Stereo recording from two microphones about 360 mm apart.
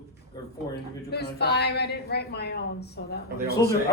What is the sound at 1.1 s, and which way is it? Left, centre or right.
A woman's voice, left.